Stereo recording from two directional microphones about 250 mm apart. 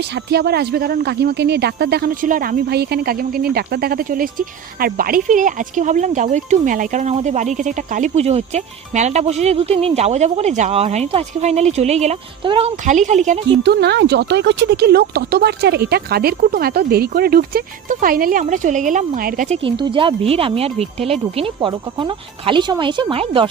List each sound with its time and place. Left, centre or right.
0.3 s speech: right
13.6 s speech: right; by 23.5 s centre